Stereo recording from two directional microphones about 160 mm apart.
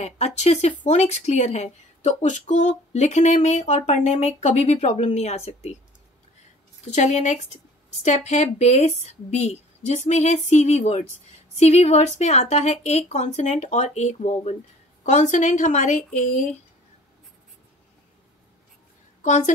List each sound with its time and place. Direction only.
0.0 s speech: 45° left (ahead or behind)
6.8 s speech: 45° left (ahead or behind)
19.2 s a woman's voice: 50° left (ahead or behind)